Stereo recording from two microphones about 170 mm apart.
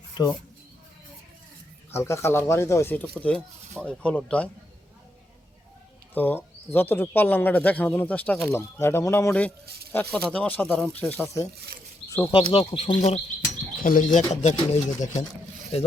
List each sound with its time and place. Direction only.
1.9 s speech: 15° left (ahead or behind)
6.1 s speech: 10° left (ahead or behind)
9.6 s speech: 65° right (ahead or behind)
9.9 s speech: 5° left (ahead or behind)
12.0 s a sound: 15° left (ahead or behind)
12.3 s speech: 30° left (ahead or behind)
13.8 s speech: 50° left (ahead or behind)